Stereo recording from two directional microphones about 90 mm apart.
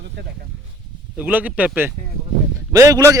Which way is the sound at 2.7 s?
40° right (ahead or behind).